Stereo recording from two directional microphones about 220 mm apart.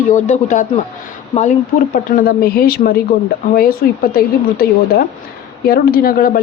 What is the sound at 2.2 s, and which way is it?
Speech, 45° left (ahead or behind).